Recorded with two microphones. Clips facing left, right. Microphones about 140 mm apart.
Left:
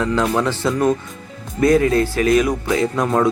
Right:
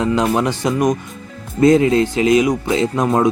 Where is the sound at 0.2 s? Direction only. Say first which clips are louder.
Right 1 dB; 15° right (ahead or behind).